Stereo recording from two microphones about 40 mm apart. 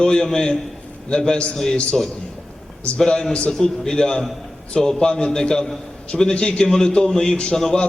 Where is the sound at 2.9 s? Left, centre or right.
Centre.